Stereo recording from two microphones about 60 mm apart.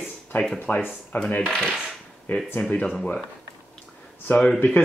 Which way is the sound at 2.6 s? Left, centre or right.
Left.